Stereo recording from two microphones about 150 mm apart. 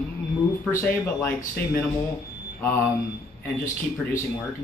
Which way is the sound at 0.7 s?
15° left (ahead or behind).